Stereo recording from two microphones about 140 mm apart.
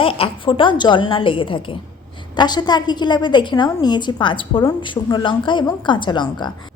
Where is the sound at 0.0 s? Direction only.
40° left (ahead or behind).